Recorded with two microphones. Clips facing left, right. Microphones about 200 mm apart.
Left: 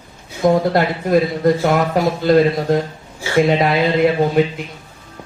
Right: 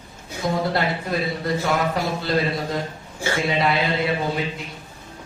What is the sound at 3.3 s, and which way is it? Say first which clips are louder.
A man's voice: left 8 dB; 50° left (ahead or behind).